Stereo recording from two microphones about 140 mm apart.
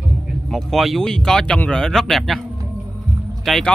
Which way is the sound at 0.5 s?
Centre (ahead or behind).